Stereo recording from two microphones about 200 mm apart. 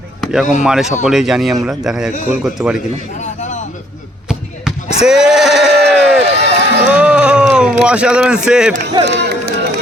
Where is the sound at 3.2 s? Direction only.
35° left (ahead or behind).